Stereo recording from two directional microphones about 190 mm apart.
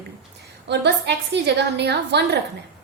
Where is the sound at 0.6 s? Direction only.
65° right (ahead or behind).